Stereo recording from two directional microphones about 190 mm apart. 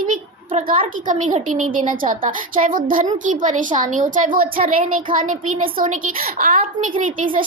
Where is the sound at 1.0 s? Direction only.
40° right (ahead or behind).